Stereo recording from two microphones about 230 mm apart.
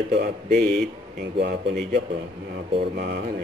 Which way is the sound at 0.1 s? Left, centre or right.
Right.